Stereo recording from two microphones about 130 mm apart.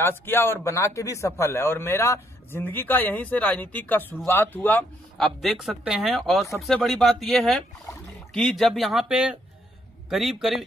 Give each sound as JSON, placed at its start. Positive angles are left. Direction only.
{"t": 0.0, "sound": "a man's voice", "side_deg": 15}
{"t": 5.1, "sound": "speech", "side_deg": 0}